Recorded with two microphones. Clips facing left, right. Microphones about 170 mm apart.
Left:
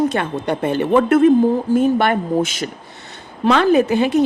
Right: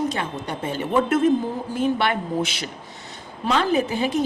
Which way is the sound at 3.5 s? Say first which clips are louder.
Left 7 dB; 70° left (ahead or behind).